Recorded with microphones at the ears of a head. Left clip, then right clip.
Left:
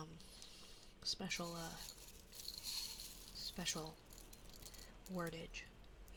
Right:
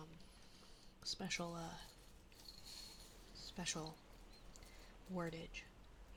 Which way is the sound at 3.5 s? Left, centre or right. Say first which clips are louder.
Even; centre.